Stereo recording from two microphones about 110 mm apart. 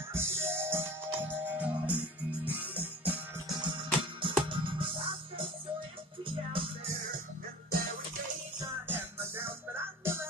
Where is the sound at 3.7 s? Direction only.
50° right (ahead or behind).